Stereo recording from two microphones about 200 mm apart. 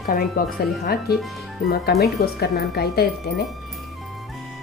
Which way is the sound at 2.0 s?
55° left (ahead or behind).